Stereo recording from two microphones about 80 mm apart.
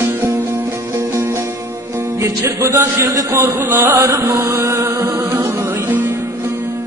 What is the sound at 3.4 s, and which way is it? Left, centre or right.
Chant, right.